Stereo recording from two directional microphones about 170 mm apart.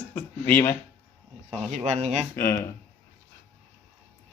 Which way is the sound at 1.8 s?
40° right (ahead or behind).